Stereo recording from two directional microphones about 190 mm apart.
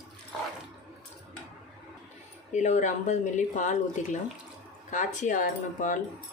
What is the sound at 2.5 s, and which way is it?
Speech, 40° left (ahead or behind).